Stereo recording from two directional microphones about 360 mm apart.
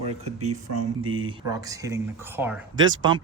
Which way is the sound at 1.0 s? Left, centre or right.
Centre.